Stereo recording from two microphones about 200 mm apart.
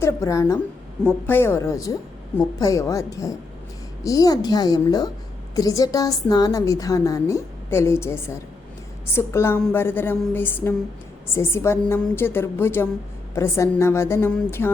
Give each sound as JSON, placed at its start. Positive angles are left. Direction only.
{"t": 0.0, "sound": "a woman's voice", "side_deg": 15}